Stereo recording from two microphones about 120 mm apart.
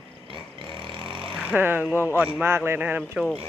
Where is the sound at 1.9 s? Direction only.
20° left (ahead or behind).